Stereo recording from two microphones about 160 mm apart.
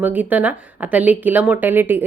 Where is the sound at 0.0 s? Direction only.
10° right (ahead or behind).